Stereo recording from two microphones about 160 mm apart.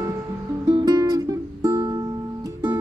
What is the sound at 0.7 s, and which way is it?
Music, 25° right (ahead or behind).